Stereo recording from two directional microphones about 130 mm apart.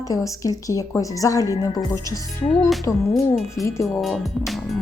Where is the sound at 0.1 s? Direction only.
25° left (ahead or behind).